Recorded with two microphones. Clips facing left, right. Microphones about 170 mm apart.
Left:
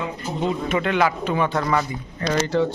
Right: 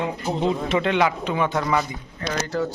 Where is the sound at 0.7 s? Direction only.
25° right (ahead or behind); by 1.9 s 10° right (ahead or behind).